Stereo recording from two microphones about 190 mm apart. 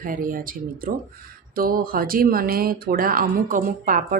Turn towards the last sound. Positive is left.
turn(degrees=-45)  # may be behind; listen again after turning